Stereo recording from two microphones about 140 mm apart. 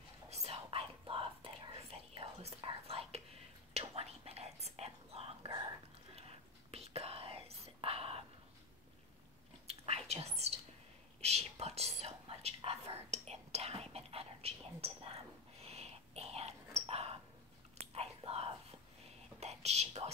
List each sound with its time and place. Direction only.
0.3 s whispering: 45° right (ahead or behind)
9.7 s whispering: 50° right (ahead or behind)